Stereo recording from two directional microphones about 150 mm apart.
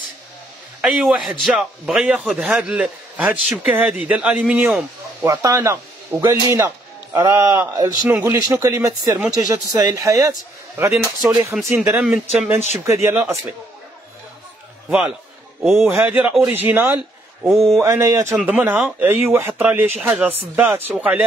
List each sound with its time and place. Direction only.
0.7 s a man's voice: 5° right (ahead or behind); by 10.3 s 20° right (ahead or behind)
10.9 s a man's voice: 5° right (ahead or behind)
12.7 s a man's voice: 20° right (ahead or behind)
14.9 s a man's voice: 10° right (ahead or behind)
17.5 s a man's voice: centre (ahead or behind)
17.8 s a man's voice: 20° right (ahead or behind)